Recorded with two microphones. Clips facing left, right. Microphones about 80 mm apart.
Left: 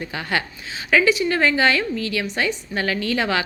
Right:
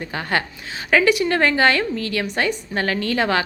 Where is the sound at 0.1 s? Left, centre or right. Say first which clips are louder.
Right 3 dB; right.